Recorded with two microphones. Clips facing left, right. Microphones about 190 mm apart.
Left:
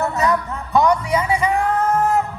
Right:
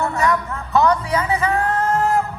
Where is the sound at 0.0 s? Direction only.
20° left (ahead or behind).